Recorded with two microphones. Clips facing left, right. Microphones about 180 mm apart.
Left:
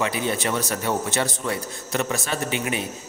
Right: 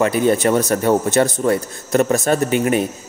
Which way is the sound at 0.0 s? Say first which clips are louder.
Right 9 dB; 45° right (ahead or behind).